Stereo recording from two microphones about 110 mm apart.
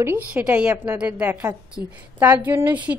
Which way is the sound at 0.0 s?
15° right (ahead or behind).